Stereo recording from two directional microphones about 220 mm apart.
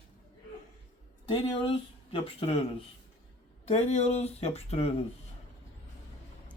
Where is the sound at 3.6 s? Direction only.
30° left (ahead or behind).